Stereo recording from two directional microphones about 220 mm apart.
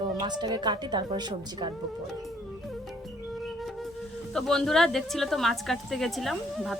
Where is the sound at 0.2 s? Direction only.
20° right (ahead or behind).